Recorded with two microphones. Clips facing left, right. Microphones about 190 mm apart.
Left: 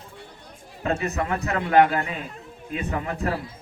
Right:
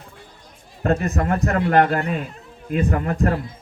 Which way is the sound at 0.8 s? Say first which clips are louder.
Right 4 dB; 50° right (ahead or behind).